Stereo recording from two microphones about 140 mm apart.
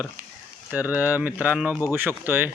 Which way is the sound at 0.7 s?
10° right (ahead or behind).